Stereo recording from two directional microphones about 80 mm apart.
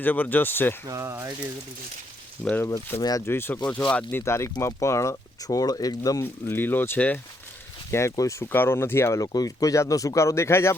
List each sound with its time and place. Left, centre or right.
0.0 s speech: left
0.9 s speech: right
2.4 s speech: right
3.0 s speech: left
3.2 s speech: left
3.7 s speech: centre
4.2 s speech: left
6.5 s speech: left
7.9 s speech: left
8.5 s speech: left